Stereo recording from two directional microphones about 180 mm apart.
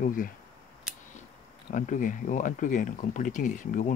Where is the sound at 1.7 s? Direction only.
45° left (ahead or behind).